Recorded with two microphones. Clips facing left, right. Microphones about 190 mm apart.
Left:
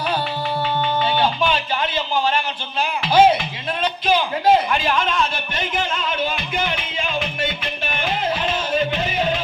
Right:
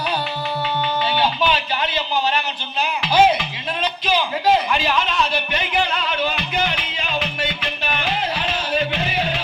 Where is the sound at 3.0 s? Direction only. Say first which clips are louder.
Left 2 dB; 50° left (ahead or behind).